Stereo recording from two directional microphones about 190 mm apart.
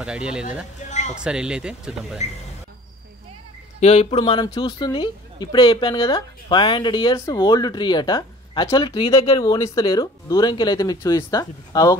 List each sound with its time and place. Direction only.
0.0 s speech: 5° right (ahead or behind)
0.8 s a sound: 40° left (ahead or behind)
1.1 s speech: 5° right (ahead or behind)
3.8 s a woman's voice: 35° left (ahead or behind); by 12.0 s 20° left (ahead or behind)